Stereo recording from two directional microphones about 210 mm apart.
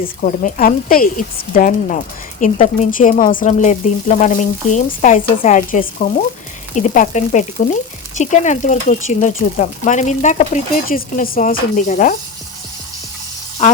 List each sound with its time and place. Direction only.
0.0 s speech: 40° left (ahead or behind)
13.6 s speech: 30° left (ahead or behind)